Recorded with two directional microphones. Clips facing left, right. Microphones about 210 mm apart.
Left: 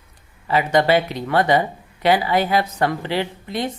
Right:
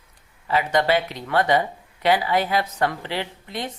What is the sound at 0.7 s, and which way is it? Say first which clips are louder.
Speech: left 5 dB; 35° left (ahead or behind).